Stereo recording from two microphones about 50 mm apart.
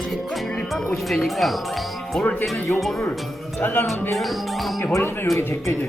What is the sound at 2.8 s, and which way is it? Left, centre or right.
Speech, centre.